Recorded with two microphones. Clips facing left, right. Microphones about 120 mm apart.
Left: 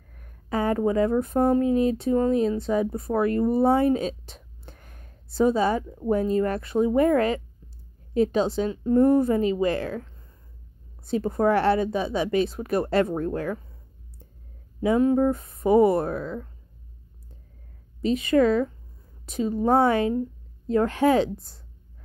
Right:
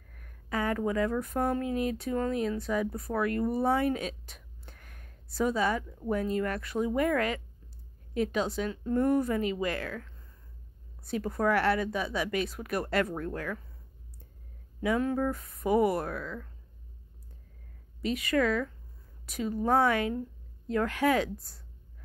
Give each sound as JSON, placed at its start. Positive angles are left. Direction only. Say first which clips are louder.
{"t": 0.1, "sound": "a woman's voice", "louder": "left 6 dB", "side_deg": 30}
{"t": 14.8, "sound": "a woman's voice", "louder": "left 8 dB", "side_deg": 25}
{"t": 18.0, "sound": "a woman's voice", "louder": "left 7 dB", "side_deg": 25}